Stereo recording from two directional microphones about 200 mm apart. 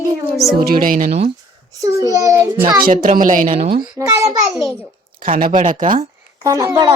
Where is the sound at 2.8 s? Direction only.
45° right (ahead or behind).